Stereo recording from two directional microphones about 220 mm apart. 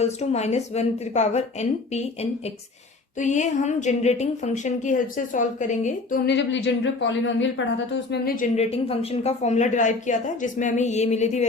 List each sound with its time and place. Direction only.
0.0 s a woman's voice: 30° left (ahead or behind)
3.2 s a woman's voice: 35° left (ahead or behind); by 7.5 s 55° left (ahead or behind)
7.9 s speech: 45° left (ahead or behind)
8.5 s a woman's voice: 25° left (ahead or behind)